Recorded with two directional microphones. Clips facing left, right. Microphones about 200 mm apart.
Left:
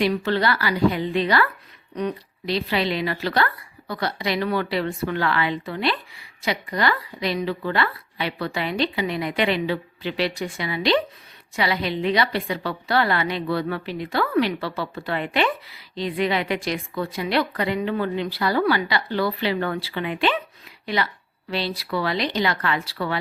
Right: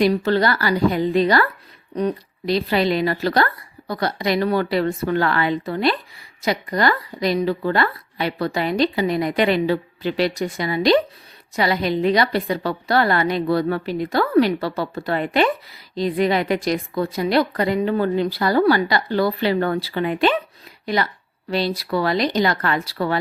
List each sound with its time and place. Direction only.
0.0 s a woman's voice: 40° right (ahead or behind)